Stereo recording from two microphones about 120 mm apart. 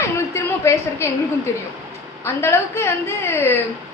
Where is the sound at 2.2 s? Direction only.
20° left (ahead or behind).